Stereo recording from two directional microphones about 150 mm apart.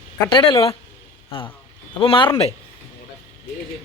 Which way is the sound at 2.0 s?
35° left (ahead or behind).